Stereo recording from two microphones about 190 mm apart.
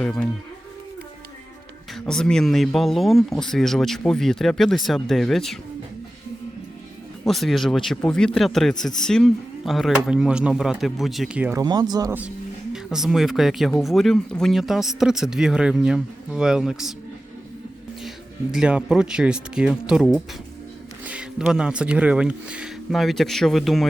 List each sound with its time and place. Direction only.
1.9 s speech: 5° left (ahead or behind)
7.3 s speech: centre (ahead or behind)
11.6 s speech: 20° right (ahead or behind)
12.7 s speech: centre (ahead or behind)
18.5 s speech: 5° right (ahead or behind)